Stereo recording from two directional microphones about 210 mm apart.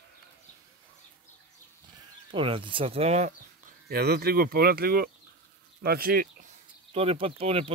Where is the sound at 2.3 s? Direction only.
25° right (ahead or behind); by 6.2 s 45° right (ahead or behind).